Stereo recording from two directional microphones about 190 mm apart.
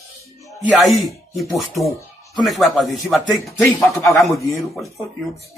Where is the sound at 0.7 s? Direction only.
Centre (ahead or behind).